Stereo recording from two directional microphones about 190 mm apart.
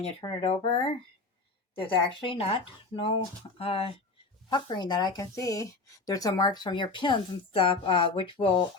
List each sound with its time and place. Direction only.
0.0 s speech: 30° left (ahead or behind)